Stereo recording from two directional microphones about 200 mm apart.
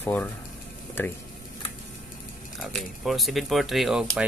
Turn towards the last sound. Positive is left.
turn(degrees=0)  # may be behind; listen again after turning